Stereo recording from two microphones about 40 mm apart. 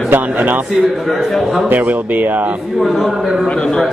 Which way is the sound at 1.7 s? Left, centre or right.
Right.